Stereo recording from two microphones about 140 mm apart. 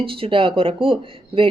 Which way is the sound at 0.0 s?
40° right (ahead or behind).